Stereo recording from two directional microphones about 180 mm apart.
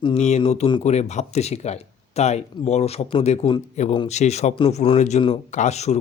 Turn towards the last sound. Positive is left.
turn(degrees=40)  # may be behind; listen again after turning